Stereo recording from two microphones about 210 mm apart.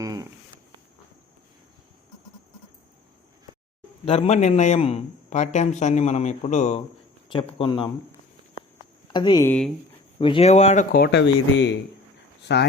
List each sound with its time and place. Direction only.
0.0 s a sound: 15° right (ahead or behind)
4.0 s a man's voice: 30° left (ahead or behind)
7.3 s speech: 20° left (ahead or behind)
9.1 s speech: 20° left (ahead or behind)
10.2 s a man's voice: 25° left (ahead or behind)
10.9 s speech: 50° left (ahead or behind)